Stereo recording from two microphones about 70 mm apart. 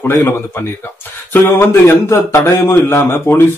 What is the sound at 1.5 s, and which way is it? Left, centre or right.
A man's voice, left.